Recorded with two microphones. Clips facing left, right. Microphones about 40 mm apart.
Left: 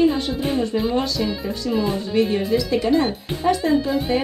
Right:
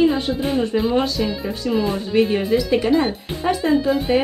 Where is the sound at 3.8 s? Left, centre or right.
Centre.